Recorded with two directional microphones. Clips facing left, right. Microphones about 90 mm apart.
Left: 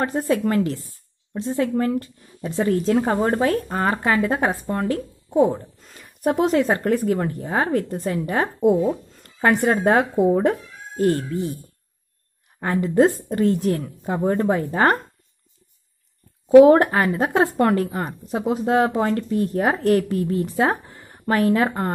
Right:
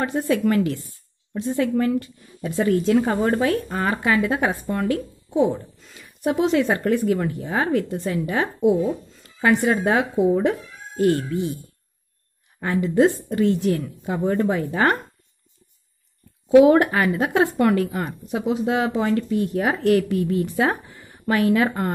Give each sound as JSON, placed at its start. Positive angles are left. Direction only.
{"t": 0.0, "sound": "speech", "side_deg": 40}
{"t": 12.5, "sound": "speech", "side_deg": 40}
{"t": 16.4, "sound": "speech", "side_deg": 40}
{"t": 21.6, "sound": "speech", "side_deg": 25}